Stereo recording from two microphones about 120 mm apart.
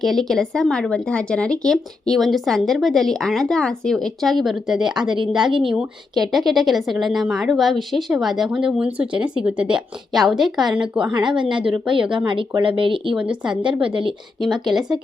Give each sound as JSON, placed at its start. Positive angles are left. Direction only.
{"t": 0.0, "sound": "speech", "side_deg": 0}
{"t": 5.0, "sound": "speech", "side_deg": -45}
{"t": 5.7, "sound": "a woman's voice", "side_deg": 0}
{"t": 11.1, "sound": "speech", "side_deg": -40}
{"t": 13.1, "sound": "a woman's voice", "side_deg": -5}
{"t": 13.8, "sound": "speech", "side_deg": -45}
{"t": 14.7, "sound": "speech", "side_deg": -5}